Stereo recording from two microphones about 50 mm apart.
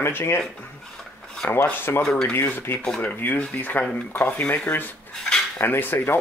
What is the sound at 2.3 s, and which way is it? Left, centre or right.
Speech, left.